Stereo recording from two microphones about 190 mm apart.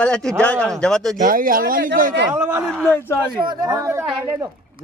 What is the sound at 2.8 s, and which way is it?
Speech, 10° left (ahead or behind).